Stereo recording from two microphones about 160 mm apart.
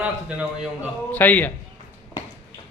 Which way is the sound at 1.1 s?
10° left (ahead or behind).